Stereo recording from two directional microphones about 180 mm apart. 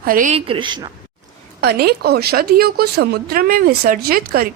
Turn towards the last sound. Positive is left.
turn(degrees=-55)  # may be behind; listen again after turning